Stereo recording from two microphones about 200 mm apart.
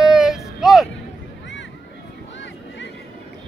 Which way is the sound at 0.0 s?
Centre (ahead or behind).